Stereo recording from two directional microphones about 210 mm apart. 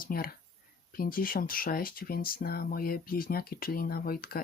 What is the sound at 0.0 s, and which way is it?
Speech, 45° left (ahead or behind).